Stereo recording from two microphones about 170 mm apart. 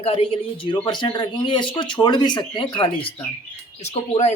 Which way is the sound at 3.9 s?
40° left (ahead or behind).